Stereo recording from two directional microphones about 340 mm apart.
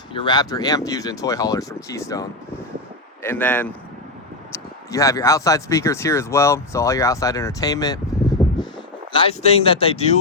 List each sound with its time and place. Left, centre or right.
0.1 s speech: centre
9.1 s speech: centre